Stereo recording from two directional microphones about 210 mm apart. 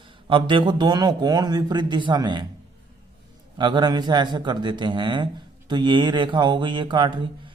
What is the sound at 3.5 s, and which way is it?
Speech, 20° right (ahead or behind).